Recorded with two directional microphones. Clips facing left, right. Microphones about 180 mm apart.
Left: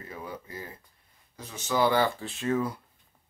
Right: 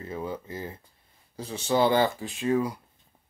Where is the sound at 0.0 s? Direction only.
25° right (ahead or behind).